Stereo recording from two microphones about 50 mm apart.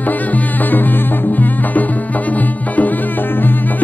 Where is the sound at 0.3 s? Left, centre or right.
Left.